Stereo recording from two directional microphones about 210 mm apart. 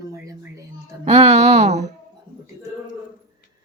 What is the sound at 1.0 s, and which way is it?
Speech, 30° right (ahead or behind).